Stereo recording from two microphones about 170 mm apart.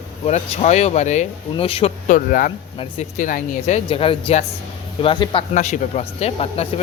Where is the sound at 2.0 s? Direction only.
50° left (ahead or behind).